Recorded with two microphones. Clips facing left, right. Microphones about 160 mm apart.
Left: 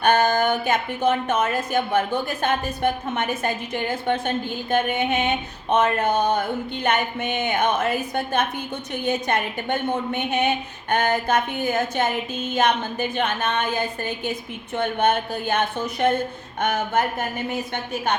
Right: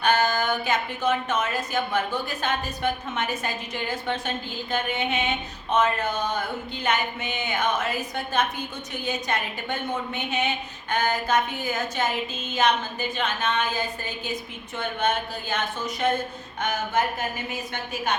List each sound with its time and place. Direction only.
0.0 s a woman's voice: 55° left (ahead or behind)